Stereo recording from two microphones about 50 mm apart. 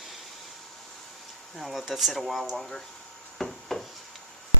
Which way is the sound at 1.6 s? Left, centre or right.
Centre.